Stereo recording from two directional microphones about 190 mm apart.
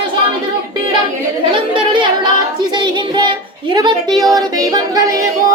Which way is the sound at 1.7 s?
25° right (ahead or behind).